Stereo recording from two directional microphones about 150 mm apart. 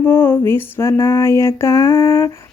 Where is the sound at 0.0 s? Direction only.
15° left (ahead or behind).